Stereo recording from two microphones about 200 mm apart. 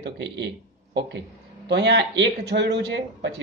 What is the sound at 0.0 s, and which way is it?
Speech, 65° right (ahead or behind).